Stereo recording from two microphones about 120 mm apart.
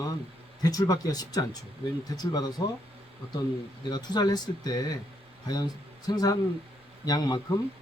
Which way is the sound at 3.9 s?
35° left (ahead or behind).